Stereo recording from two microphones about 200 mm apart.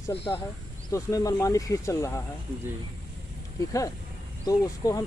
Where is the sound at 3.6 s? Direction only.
15° left (ahead or behind).